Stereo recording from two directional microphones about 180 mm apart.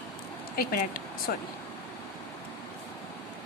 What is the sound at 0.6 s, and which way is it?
Speech, 50° left (ahead or behind).